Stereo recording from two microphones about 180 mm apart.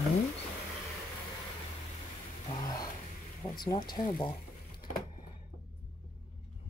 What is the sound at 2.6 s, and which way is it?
Vehicle, 20° left (ahead or behind).